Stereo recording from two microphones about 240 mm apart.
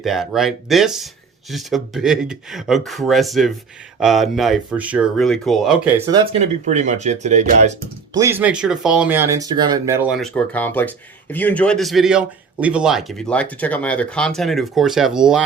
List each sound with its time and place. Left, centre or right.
0.0 s speech: centre
6.1 s speech: right
8.1 s speech: centre